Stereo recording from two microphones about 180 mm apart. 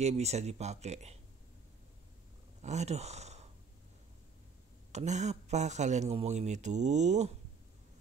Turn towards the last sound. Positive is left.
turn(degrees=-40)  # may be behind; listen again after turning